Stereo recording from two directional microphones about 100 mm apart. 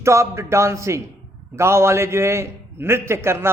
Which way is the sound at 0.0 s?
30° right (ahead or behind).